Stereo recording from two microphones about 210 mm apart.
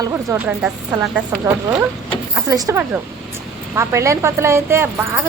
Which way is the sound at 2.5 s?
15° right (ahead or behind).